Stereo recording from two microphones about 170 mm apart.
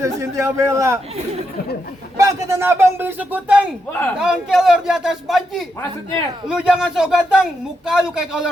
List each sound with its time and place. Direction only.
0.0 s speech: 15° right (ahead or behind)
2.1 s speech: 15° right (ahead or behind)